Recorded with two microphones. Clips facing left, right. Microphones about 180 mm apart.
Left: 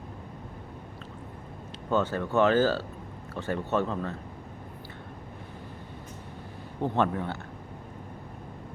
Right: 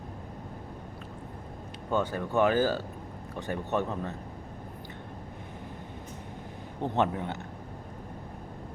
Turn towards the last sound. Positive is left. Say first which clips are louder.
# left 1 dB
turn(degrees=-20)  # may be behind; listen again after turning